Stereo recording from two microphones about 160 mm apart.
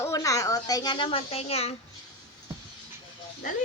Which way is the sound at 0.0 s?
20° left (ahead or behind).